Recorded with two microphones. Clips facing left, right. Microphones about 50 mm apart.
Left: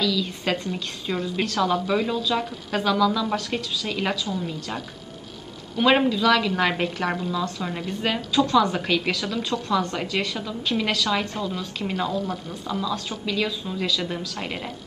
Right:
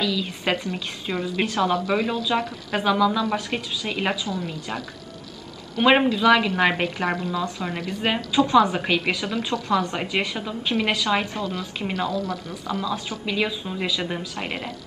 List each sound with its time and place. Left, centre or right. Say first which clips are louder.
0.0 s a woman's voice: even; centre
5.8 s a woman's voice: right 1 dB; right
12.1 s speech: even; right
12.6 s a woman's voice: even; centre